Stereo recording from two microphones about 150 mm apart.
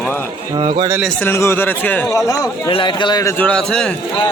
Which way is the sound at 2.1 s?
20° left (ahead or behind).